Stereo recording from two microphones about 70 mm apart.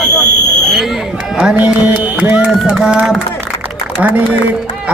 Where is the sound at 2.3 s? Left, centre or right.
Centre.